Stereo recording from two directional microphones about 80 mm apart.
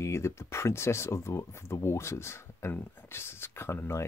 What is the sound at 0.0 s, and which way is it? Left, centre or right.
Speech, left.